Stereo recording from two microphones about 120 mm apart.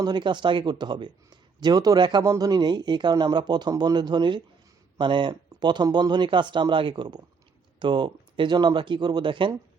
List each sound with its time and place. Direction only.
0.0 s speech: 40° right (ahead or behind)